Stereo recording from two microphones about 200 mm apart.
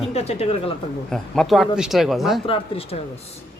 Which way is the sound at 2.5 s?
25° left (ahead or behind).